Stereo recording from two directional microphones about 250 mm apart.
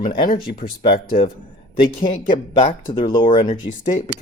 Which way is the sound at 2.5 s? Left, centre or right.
Centre.